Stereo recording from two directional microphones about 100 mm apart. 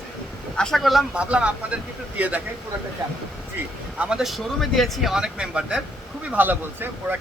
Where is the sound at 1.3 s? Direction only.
10° right (ahead or behind).